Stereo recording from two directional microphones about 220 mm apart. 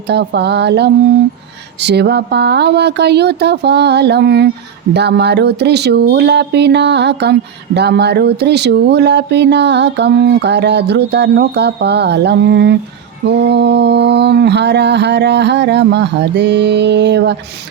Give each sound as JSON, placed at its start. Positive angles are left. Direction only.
{"t": 0.1, "sound": "speech", "side_deg": -50}